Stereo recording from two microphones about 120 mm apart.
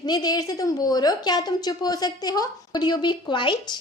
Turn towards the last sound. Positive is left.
turn(degrees=40)  # may be behind; listen again after turning